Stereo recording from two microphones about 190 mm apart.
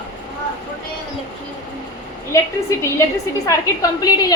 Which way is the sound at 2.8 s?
15° left (ahead or behind).